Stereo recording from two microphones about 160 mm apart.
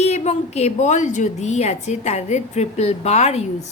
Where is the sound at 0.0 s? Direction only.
45° left (ahead or behind).